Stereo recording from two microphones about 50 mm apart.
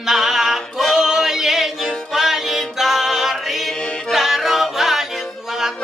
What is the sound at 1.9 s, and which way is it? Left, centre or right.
Music, centre.